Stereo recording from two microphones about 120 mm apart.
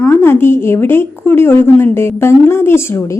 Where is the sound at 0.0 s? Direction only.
20° left (ahead or behind).